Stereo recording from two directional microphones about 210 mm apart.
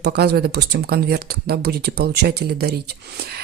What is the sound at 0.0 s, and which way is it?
Speech, 50° right (ahead or behind).